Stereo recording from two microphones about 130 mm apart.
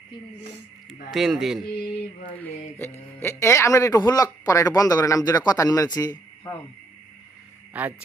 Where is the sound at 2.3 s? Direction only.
15° left (ahead or behind).